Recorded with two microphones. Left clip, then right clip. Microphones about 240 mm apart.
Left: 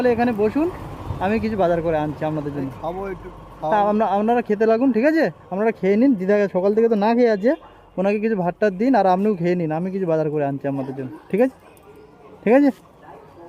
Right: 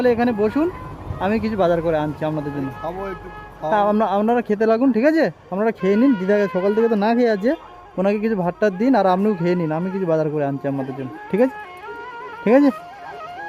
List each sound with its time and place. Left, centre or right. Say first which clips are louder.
0.0 s speech: right 1 dB; centre